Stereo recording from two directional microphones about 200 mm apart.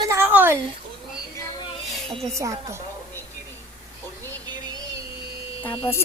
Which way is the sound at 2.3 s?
15° right (ahead or behind).